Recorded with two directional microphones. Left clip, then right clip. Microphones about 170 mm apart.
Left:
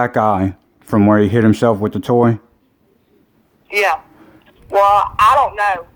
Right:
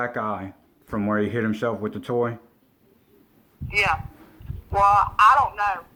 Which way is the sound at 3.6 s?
25° left (ahead or behind).